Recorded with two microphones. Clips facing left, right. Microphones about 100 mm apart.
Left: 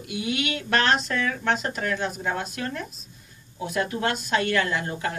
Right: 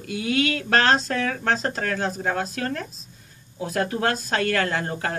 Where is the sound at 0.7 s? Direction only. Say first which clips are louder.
Right 2 dB; 35° right (ahead or behind).